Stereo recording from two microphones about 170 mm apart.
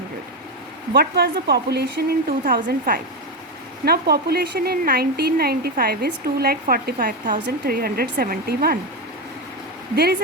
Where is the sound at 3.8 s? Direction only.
65° right (ahead or behind).